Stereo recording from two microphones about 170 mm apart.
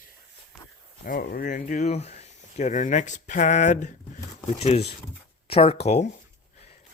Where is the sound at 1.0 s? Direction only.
55° left (ahead or behind).